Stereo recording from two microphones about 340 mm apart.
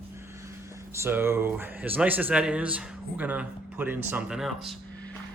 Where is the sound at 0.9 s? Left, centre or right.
Centre.